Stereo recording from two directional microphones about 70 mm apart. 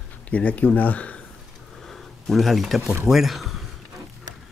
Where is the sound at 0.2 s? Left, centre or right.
Left.